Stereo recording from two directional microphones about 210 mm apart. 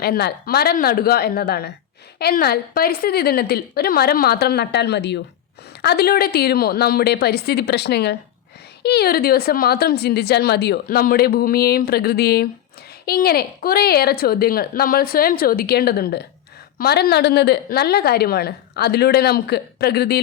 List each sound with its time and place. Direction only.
0.0 s a woman's voice: 50° left (ahead or behind)